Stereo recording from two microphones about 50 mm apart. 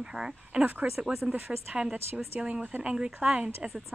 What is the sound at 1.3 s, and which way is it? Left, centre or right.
Speech, right.